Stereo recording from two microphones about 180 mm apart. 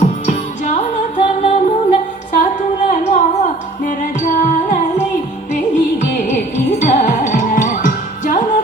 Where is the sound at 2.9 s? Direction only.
45° left (ahead or behind).